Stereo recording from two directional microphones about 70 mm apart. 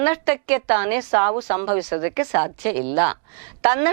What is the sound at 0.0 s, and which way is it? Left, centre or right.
A woman's voice, centre.